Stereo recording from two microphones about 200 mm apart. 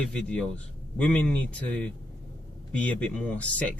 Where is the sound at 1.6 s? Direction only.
5° left (ahead or behind).